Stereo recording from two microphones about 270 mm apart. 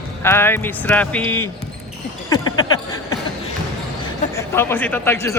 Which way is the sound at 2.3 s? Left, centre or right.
Centre.